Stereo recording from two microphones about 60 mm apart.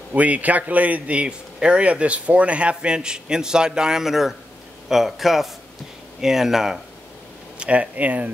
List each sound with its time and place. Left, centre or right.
0.1 s a man's voice: right; by 6.8 s centre
7.5 s speech: centre